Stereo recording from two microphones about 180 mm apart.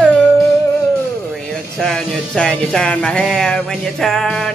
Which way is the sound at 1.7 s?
5° left (ahead or behind).